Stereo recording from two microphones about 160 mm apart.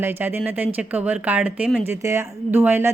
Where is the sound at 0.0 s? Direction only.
15° right (ahead or behind).